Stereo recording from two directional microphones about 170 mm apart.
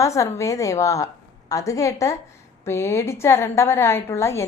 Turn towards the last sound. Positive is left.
turn(degrees=15)  # may be behind; listen again after turning